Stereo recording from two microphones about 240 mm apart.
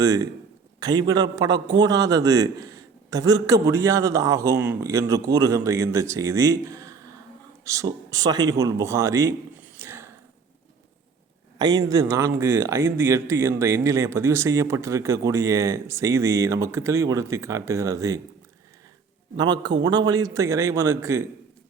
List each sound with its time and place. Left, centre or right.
0.0 s speech: centre
11.5 s speech: centre
19.4 s speech: centre